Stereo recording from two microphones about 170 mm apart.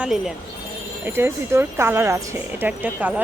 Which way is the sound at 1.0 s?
15° right (ahead or behind).